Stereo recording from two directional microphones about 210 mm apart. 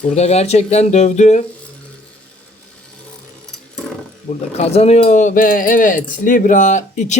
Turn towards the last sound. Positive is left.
turn(degrees=35)  # may be behind; listen again after turning